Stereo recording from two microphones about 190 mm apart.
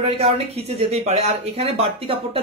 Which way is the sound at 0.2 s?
30° right (ahead or behind).